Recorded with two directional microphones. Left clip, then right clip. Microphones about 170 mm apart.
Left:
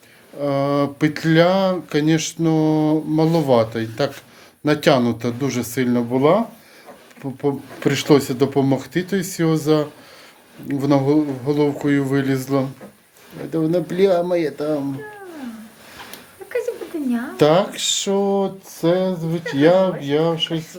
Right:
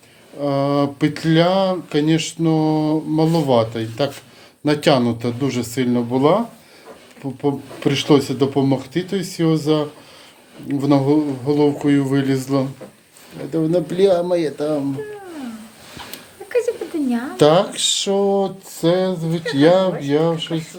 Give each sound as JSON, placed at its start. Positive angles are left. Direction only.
{"t": 0.3, "sound": "speech", "side_deg": 15}
{"t": 7.4, "sound": "speech", "side_deg": 20}
{"t": 17.3, "sound": "speech", "side_deg": 5}